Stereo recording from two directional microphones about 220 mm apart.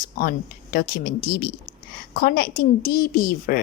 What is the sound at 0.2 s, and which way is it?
A woman's voice, 45° left (ahead or behind).